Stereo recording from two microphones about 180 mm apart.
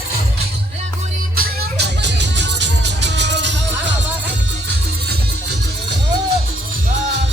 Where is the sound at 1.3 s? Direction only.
70° right (ahead or behind).